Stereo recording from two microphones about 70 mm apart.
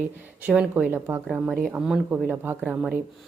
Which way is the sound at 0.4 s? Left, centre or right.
Centre.